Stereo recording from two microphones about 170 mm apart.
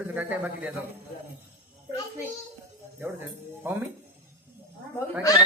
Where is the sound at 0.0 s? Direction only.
10° right (ahead or behind).